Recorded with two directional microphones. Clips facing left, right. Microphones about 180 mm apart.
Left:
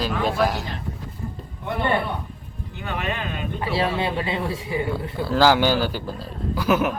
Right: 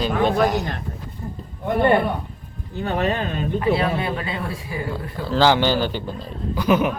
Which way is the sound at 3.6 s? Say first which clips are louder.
Right 3 dB; 30° left (ahead or behind).